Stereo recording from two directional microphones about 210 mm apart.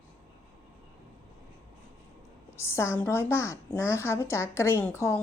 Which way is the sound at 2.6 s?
10° left (ahead or behind).